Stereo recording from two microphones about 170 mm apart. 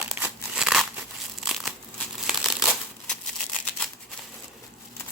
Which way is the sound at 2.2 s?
5° right (ahead or behind).